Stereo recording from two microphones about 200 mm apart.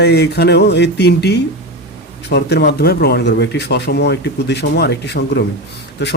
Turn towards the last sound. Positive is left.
turn(degrees=60)  # may be behind; listen again after turning